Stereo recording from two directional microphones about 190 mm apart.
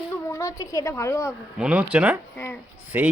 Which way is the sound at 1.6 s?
5° right (ahead or behind).